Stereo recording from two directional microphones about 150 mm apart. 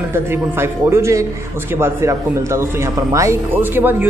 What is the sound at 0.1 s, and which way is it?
A man's voice, 15° right (ahead or behind).